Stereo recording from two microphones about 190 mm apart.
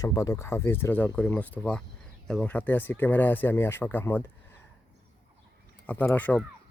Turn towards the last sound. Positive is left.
turn(degrees=10)  # may be behind; listen again after turning